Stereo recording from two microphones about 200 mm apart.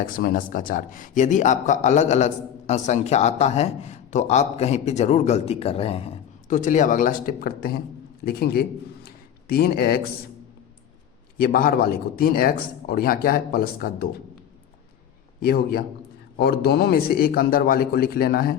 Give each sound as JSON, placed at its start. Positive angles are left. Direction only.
{"t": 0.0, "sound": "a man's voice", "side_deg": 45}
{"t": 9.0, "sound": "a sound", "side_deg": 50}
{"t": 11.3, "sound": "a man's voice", "side_deg": 45}
{"t": 15.4, "sound": "a man's voice", "side_deg": 50}